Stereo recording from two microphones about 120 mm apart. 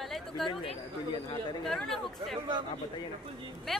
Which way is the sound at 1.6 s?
5° left (ahead or behind).